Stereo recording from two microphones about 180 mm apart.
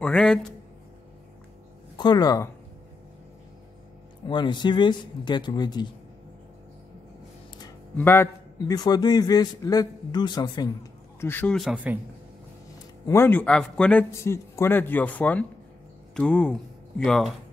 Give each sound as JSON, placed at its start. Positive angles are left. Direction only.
{"t": 0.0, "sound": "a man's voice", "side_deg": 5}
{"t": 2.0, "sound": "a man's voice", "side_deg": 25}
{"t": 4.3, "sound": "a man's voice", "side_deg": 25}
{"t": 8.0, "sound": "a man's voice", "side_deg": 15}
{"t": 13.0, "sound": "a man's voice", "side_deg": 15}